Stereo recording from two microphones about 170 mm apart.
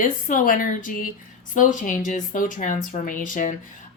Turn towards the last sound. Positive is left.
turn(degrees=50)  # may be behind; listen again after turning